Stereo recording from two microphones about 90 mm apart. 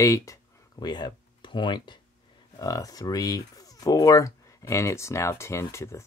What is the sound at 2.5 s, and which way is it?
Speech, 40° left (ahead or behind).